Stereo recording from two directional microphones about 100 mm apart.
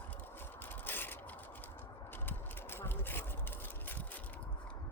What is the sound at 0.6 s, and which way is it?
Scrape, 20° left (ahead or behind).